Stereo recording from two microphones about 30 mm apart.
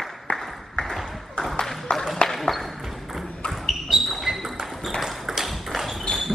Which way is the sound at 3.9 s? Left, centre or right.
Centre.